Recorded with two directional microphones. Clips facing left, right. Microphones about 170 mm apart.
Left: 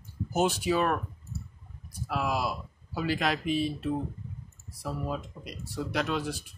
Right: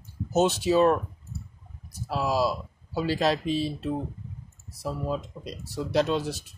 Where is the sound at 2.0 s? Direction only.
30° right (ahead or behind).